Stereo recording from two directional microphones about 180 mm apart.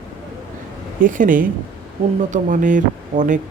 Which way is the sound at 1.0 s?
45° right (ahead or behind).